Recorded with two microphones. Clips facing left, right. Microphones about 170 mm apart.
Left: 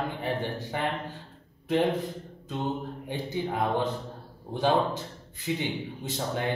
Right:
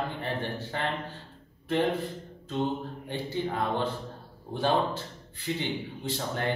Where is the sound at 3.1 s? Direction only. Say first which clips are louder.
Even; 15° left (ahead or behind).